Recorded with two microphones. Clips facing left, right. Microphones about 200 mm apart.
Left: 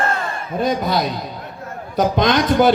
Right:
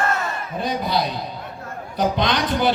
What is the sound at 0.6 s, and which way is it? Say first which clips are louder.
Speech: left 4 dB; 45° left (ahead or behind).